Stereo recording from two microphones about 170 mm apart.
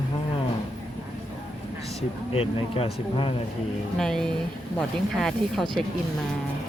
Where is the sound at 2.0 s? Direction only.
35° left (ahead or behind).